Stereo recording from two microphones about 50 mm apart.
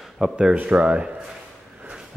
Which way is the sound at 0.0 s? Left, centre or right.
Centre.